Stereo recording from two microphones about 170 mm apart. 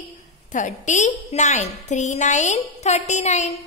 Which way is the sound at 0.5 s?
45° left (ahead or behind).